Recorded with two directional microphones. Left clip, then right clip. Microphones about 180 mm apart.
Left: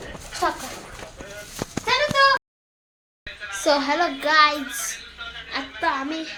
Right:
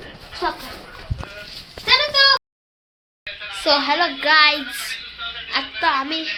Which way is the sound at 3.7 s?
15° left (ahead or behind).